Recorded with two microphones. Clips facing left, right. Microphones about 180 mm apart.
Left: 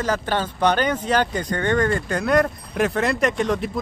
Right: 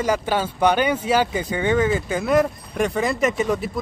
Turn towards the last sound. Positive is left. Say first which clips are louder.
# even
turn(degrees=-5)  # may be behind; listen again after turning